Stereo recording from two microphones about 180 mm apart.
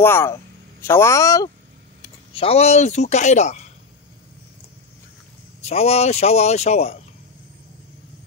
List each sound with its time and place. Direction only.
0.0 s speech: 15° left (ahead or behind)
2.3 s speech: 35° left (ahead or behind)
5.6 s speech: 35° left (ahead or behind)